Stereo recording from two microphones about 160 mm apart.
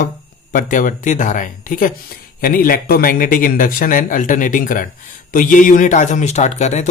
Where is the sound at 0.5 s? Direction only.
55° left (ahead or behind).